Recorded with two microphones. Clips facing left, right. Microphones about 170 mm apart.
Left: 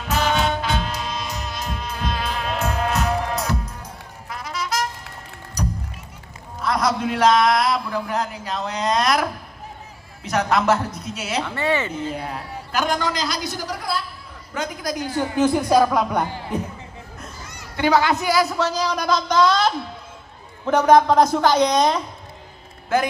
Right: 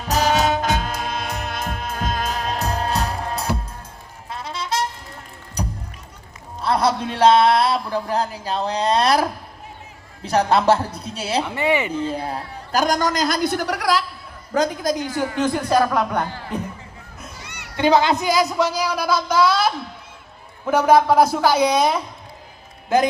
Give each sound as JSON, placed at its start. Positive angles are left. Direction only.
{"t": 0.1, "sound": "music", "side_deg": -40}
{"t": 6.6, "sound": "a man's voice", "side_deg": -30}
{"t": 11.4, "sound": "speech", "side_deg": -15}
{"t": 12.1, "sound": "a man's voice", "side_deg": -35}
{"t": 14.5, "sound": "a woman's voice", "side_deg": -35}
{"t": 15.4, "sound": "speech", "side_deg": 10}
{"t": 17.4, "sound": "a sound", "side_deg": -70}
{"t": 17.7, "sound": "speech", "side_deg": -20}